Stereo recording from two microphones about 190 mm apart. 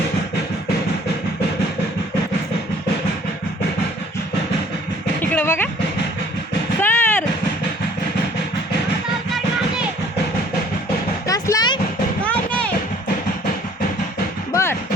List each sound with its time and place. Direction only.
5.2 s music: 10° left (ahead or behind)
6.8 s drum: 10° left (ahead or behind)
11.3 s music: 20° left (ahead or behind)
12.2 s music: 5° left (ahead or behind)
14.5 s a sound: 15° left (ahead or behind)